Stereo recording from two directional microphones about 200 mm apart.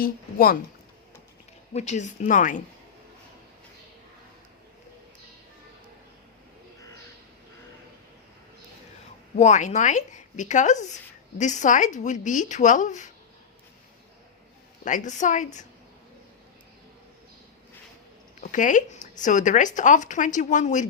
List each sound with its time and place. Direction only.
0.0 s speech: 45° left (ahead or behind)
1.7 s a woman's voice: 35° left (ahead or behind)
9.3 s a woman's voice: 35° left (ahead or behind)
14.8 s a woman's voice: 40° left (ahead or behind)
18.3 s a woman's voice: 40° left (ahead or behind)